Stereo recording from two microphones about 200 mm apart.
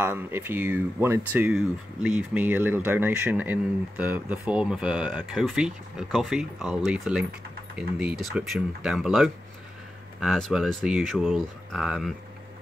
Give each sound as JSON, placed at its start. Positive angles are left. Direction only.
{"t": 0.0, "sound": "speech", "side_deg": -10}